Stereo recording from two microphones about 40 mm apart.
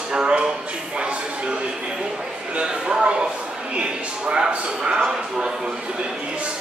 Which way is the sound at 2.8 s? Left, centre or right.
Right.